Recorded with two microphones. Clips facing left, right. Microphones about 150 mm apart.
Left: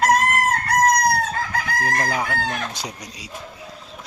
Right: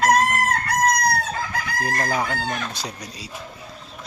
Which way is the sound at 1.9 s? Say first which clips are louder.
Right 1 dB; 5° right (ahead or behind).